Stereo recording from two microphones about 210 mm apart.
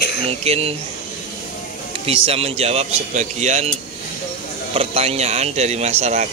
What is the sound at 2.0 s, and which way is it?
Speech, 25° right (ahead or behind).